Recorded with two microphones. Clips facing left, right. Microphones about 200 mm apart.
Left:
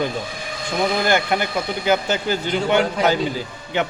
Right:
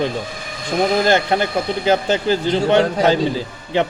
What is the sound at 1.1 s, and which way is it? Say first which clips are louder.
A man's voice: right 3 dB; 30° right (ahead or behind).